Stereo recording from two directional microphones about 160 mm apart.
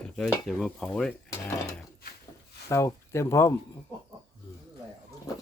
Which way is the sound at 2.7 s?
15° left (ahead or behind).